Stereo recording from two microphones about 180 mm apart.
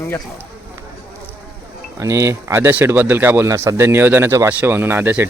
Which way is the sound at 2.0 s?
15° right (ahead or behind).